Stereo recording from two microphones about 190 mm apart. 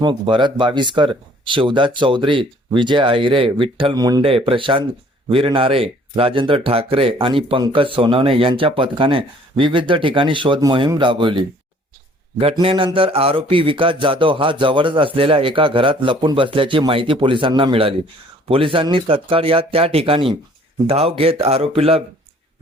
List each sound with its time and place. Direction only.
0.0 s speech: 25° right (ahead or behind)